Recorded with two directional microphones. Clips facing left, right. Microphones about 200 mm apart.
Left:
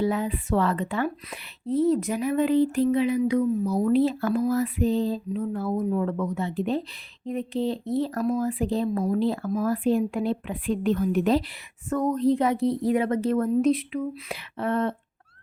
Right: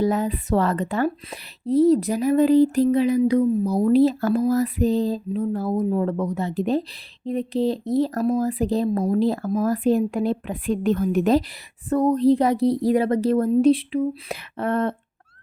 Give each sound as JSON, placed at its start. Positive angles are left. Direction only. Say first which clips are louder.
{"t": 0.0, "sound": "a woman's voice", "louder": "right 4 dB", "side_deg": -40}
{"t": 11.9, "sound": "a woman's voice", "louder": "right 5 dB", "side_deg": -35}
{"t": 14.3, "sound": "speech", "louder": "even", "side_deg": -50}